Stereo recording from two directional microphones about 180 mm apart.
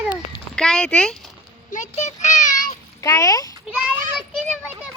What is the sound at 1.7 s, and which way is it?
Child singing, 40° left (ahead or behind).